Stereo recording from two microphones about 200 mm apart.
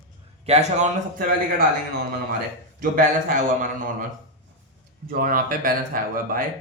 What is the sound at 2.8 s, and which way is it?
Speech, 45° right (ahead or behind).